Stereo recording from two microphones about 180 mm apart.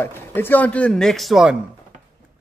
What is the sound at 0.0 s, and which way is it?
A man's voice, 10° left (ahead or behind).